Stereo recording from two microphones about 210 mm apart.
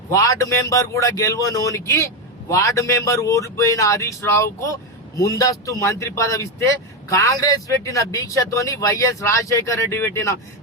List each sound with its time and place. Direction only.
0.1 s a man's voice: 15° left (ahead or behind)